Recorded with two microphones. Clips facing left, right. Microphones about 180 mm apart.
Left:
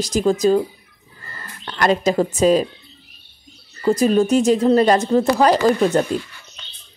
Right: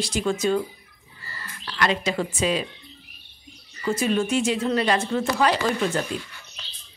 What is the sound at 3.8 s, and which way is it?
A woman's voice, 40° left (ahead or behind).